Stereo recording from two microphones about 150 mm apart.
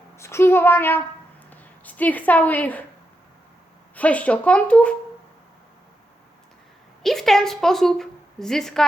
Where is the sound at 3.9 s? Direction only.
10° left (ahead or behind).